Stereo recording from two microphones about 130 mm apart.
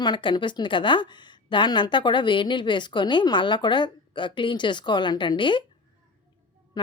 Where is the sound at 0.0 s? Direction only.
35° left (ahead or behind).